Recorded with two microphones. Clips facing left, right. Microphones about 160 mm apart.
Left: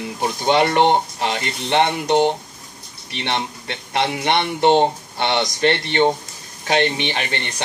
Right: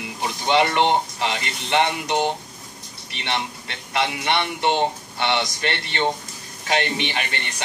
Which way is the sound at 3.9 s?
40° left (ahead or behind).